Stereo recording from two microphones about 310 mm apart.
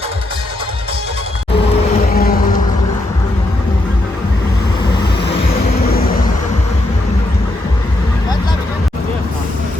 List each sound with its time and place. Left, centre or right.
2.1 s vehicle: left